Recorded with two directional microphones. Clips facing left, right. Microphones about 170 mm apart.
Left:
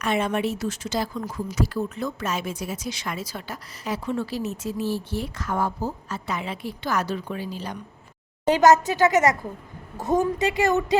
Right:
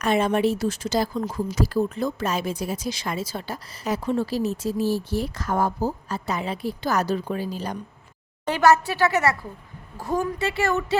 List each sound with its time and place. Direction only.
0.0 s speech: 35° right (ahead or behind)
8.4 s a woman's voice: 15° left (ahead or behind)